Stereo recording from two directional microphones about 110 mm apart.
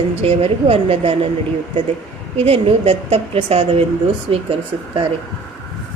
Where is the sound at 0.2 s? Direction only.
65° right (ahead or behind).